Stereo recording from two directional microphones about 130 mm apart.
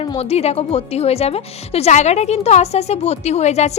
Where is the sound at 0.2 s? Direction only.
55° left (ahead or behind).